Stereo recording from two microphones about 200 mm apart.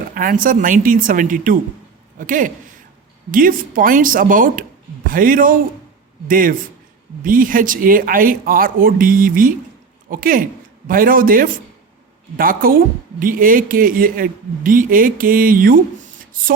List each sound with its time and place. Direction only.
0.1 s a man's voice: 45° right (ahead or behind)